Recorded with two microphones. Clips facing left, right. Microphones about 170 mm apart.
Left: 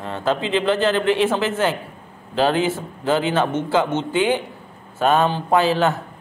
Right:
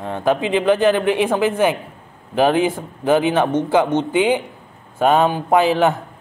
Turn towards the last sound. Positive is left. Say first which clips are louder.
# right 2 dB
turn(degrees=-15)  # may be behind; listen again after turning